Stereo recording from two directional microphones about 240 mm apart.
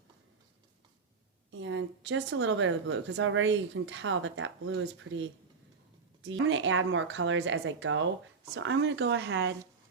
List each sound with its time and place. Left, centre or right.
1.5 s speech: right